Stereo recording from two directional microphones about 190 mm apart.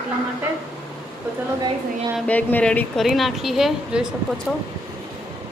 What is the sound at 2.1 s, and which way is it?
A woman's voice, 5° left (ahead or behind).